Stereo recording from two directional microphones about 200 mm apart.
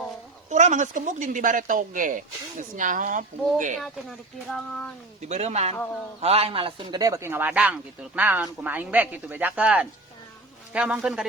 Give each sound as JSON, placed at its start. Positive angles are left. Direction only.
{"t": 0.5, "sound": "speech", "side_deg": -35}
{"t": 5.3, "sound": "speech", "side_deg": -35}
{"t": 5.7, "sound": "a man's voice", "side_deg": 10}
{"t": 6.1, "sound": "speech", "side_deg": -30}